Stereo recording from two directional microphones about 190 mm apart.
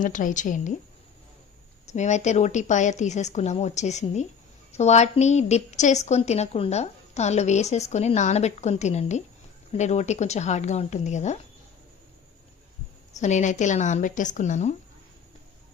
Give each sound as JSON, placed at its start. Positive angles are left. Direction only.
{"t": 0.0, "sound": "a woman's voice", "side_deg": 45}
{"t": 1.9, "sound": "a woman's voice", "side_deg": 40}
{"t": 13.1, "sound": "a woman's voice", "side_deg": 40}